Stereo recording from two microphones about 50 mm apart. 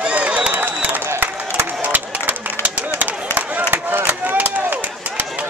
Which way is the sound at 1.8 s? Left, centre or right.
Right.